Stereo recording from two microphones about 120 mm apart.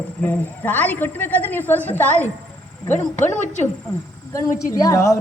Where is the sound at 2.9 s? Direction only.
90° left.